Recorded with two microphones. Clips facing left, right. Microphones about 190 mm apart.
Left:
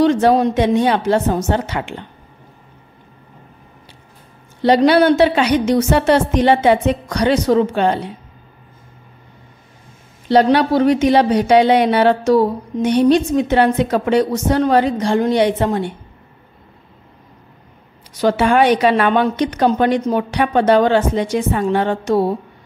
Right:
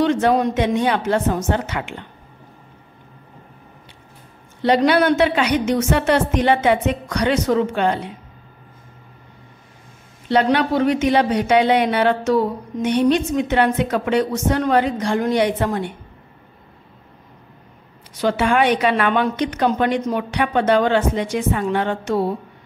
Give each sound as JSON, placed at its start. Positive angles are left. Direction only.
{"t": 0.0, "sound": "speech", "side_deg": 35}
{"t": 4.6, "sound": "speech", "side_deg": 35}
{"t": 10.2, "sound": "speech", "side_deg": 35}
{"t": 18.2, "sound": "speech", "side_deg": 40}